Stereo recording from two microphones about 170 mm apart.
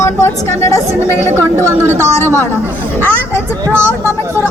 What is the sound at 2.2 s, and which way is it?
Speech, 10° left (ahead or behind).